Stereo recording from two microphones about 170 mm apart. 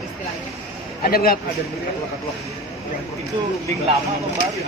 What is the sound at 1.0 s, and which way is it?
Speech, 60° left (ahead or behind).